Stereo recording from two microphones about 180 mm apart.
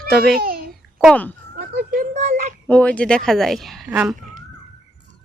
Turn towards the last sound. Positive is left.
turn(degrees=-5)  # may be behind; listen again after turning